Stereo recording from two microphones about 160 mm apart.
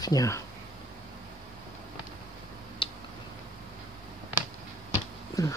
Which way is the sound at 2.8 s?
35° left (ahead or behind).